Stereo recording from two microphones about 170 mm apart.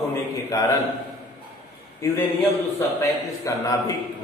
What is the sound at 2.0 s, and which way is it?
Speech, 15° left (ahead or behind).